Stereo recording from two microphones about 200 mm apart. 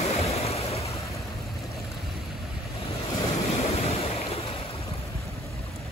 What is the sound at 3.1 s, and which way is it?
Waves, 30° left (ahead or behind).